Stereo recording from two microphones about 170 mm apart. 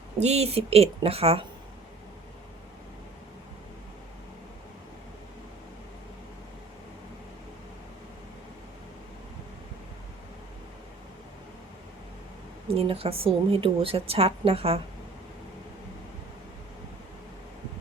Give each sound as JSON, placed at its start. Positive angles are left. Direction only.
{"t": 0.2, "sound": "a woman's voice", "side_deg": -40}
{"t": 12.6, "sound": "a woman's voice", "side_deg": -35}